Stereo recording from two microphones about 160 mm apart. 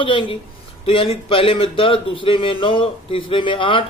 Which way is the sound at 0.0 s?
35° left (ahead or behind).